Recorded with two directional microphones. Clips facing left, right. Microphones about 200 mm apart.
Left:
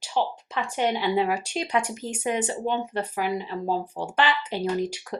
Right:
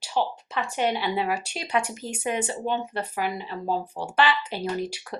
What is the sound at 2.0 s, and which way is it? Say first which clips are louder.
Speech: left 1 dB; 10° right (ahead or behind).